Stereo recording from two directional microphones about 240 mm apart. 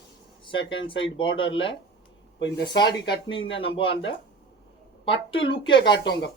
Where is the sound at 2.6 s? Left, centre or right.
Centre.